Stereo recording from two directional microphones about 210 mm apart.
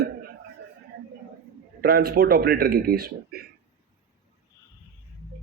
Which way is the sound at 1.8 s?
50° right (ahead or behind).